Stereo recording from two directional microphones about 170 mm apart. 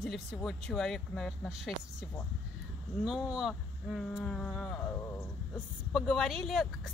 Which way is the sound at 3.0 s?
5° right (ahead or behind).